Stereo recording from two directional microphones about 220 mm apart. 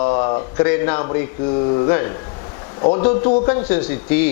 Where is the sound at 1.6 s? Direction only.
25° left (ahead or behind).